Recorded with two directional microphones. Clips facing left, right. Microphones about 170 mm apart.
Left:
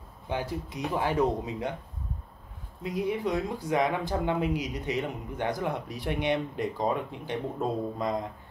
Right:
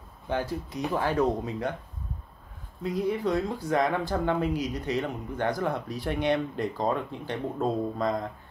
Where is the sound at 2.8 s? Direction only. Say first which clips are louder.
Right 2 dB; 15° left (ahead or behind).